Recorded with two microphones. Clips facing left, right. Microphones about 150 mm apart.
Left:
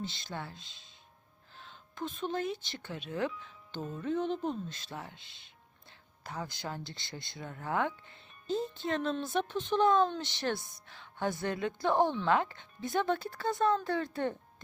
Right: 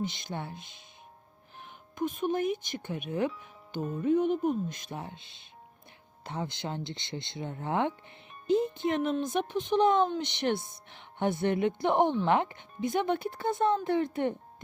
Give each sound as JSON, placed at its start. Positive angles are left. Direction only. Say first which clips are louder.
{"t": 0.0, "sound": "speech", "louder": "right 5 dB", "side_deg": -20}